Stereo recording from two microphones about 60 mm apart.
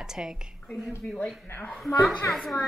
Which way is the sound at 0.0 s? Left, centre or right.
Centre.